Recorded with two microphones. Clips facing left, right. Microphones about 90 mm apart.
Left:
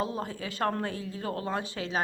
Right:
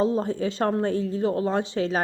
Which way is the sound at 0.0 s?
30° right (ahead or behind).